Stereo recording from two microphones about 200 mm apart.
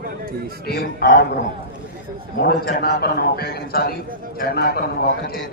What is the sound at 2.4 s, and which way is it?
A man's voice, 50° left (ahead or behind).